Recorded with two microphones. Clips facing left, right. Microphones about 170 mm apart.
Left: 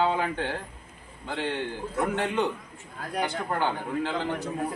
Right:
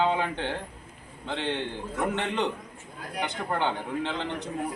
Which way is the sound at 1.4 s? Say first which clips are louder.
Even; 20° right (ahead or behind).